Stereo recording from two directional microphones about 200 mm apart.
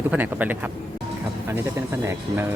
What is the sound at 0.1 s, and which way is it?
Speech, 10° right (ahead or behind).